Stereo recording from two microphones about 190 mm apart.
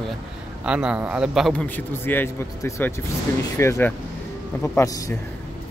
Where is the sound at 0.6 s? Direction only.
5° right (ahead or behind); by 5.2 s 15° left (ahead or behind).